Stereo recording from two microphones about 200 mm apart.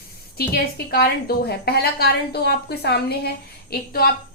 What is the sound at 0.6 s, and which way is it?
A woman's voice, 50° left (ahead or behind).